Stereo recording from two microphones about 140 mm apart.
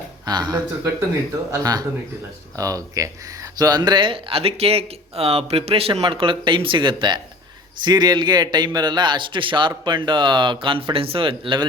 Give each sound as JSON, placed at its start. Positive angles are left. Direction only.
{"t": 0.3, "sound": "speech", "side_deg": -30}